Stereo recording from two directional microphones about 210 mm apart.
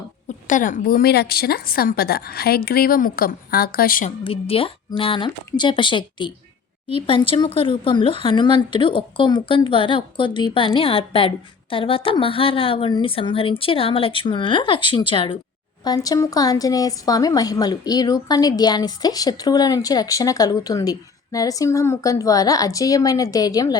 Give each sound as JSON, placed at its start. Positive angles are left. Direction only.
{"t": 0.4, "sound": "speech", "side_deg": 35}
{"t": 4.2, "sound": "a woman's voice", "side_deg": 25}